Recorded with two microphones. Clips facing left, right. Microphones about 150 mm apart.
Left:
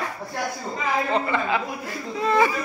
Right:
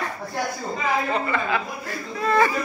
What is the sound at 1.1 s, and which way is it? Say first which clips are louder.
A woman's voice: left 1 dB; 25° left (ahead or behind).